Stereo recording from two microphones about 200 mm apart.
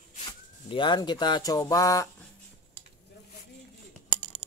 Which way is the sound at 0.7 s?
25° left (ahead or behind).